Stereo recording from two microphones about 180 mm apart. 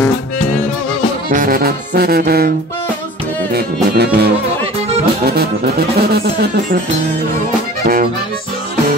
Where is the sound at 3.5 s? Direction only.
65° right (ahead or behind).